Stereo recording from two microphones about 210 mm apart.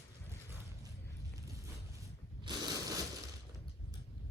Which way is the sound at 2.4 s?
20° right (ahead or behind).